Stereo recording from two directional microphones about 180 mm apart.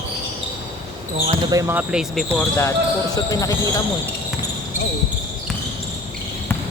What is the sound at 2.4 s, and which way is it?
Speech, 15° left (ahead or behind).